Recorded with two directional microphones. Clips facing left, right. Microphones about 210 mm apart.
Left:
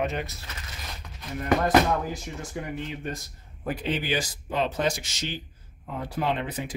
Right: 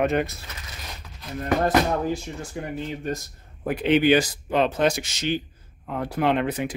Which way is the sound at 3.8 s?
65° right (ahead or behind).